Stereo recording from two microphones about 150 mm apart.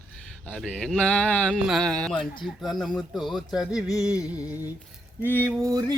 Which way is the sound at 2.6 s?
Centre (ahead or behind).